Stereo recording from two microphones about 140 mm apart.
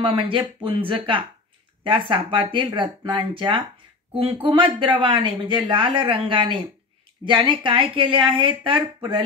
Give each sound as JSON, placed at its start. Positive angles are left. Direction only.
{"t": 0.0, "sound": "speech", "side_deg": -40}